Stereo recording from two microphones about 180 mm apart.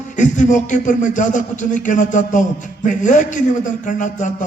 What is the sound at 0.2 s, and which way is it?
Speech, 45° left (ahead or behind).